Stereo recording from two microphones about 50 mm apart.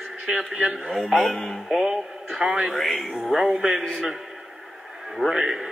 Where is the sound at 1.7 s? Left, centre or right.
Centre.